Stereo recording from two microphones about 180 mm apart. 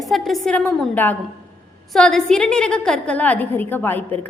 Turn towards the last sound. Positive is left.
turn(degrees=10)  # may be behind; listen again after turning